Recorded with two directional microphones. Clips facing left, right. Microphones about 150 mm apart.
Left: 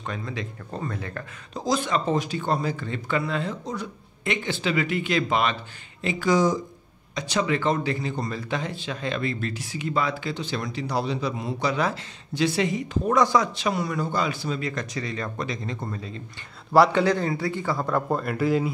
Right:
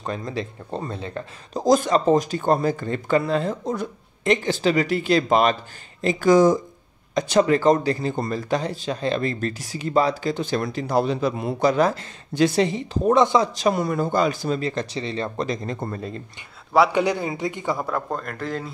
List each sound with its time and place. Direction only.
0.0 s a man's voice: 35° right (ahead or behind)
1.5 s a man's voice: 45° right (ahead or behind)
13.2 s speech: 20° right (ahead or behind)
13.6 s speech: 45° right (ahead or behind)
14.7 s speech: 30° right (ahead or behind)
15.4 s speech: 45° right (ahead or behind)
16.9 s speech: 15° right (ahead or behind)
17.8 s a man's voice: 5° left (ahead or behind)